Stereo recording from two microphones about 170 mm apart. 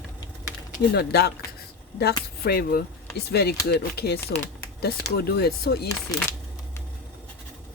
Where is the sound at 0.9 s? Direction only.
70° left (ahead or behind).